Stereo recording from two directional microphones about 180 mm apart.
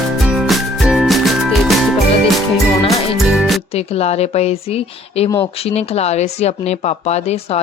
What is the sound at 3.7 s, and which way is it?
Speech, 35° left (ahead or behind).